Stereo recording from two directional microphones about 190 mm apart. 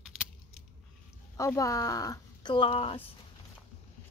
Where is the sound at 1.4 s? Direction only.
15° left (ahead or behind).